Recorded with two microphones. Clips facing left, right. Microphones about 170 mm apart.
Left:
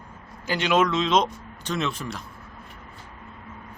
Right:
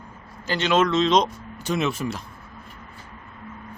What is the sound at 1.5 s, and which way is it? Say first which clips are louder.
Speech: right 4 dB; 10° right (ahead or behind).